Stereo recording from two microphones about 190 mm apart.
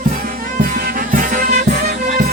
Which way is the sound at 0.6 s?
50° right (ahead or behind).